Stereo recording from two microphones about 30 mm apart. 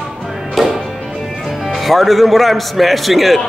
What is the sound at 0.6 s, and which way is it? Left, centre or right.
Music, centre.